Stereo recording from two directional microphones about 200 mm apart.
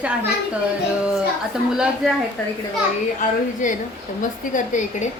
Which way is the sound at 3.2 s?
40° left (ahead or behind).